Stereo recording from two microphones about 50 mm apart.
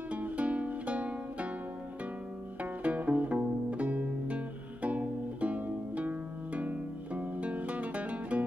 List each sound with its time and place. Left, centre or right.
0.1 s music: right
2.6 s music: right